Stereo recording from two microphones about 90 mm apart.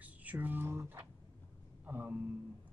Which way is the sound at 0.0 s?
15° right (ahead or behind).